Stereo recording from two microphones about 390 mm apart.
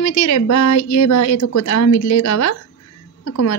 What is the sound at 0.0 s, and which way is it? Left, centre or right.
Speech, left.